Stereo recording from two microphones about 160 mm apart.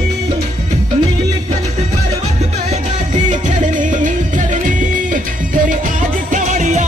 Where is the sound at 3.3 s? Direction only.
50° right (ahead or behind).